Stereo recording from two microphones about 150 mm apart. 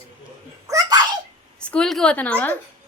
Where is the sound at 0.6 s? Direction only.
20° right (ahead or behind).